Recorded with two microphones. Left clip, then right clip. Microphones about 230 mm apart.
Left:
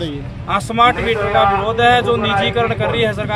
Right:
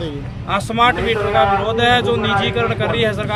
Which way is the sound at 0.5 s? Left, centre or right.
Centre.